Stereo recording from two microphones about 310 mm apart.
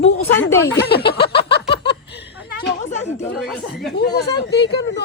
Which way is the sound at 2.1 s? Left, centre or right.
Left.